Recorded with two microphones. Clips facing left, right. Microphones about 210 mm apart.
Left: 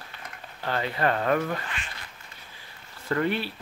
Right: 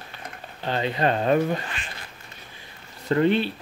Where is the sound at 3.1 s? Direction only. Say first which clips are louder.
Right 6 dB; 25° right (ahead or behind).